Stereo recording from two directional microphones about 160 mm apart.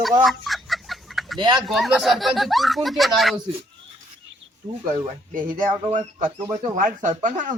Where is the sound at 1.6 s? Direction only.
Centre (ahead or behind).